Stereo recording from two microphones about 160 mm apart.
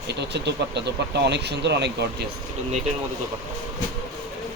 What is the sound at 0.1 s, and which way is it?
Speech, 90° right.